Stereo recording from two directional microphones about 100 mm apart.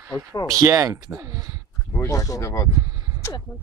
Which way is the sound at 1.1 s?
25° right (ahead or behind).